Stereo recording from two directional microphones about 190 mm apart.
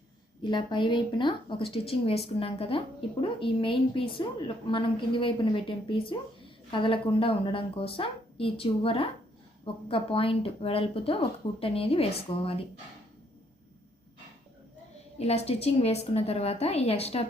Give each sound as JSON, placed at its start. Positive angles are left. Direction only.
{"t": 0.4, "sound": "a woman's voice", "side_deg": 25}
{"t": 15.2, "sound": "a woman's voice", "side_deg": 35}